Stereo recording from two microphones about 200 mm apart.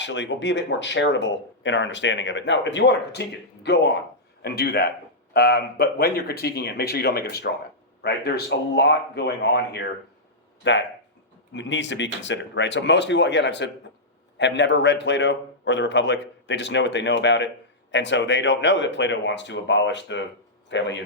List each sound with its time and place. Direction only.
0.0 s speech: 65° left (ahead or behind)